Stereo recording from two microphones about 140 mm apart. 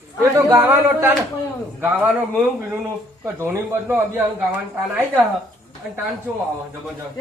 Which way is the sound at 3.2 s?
15° right (ahead or behind).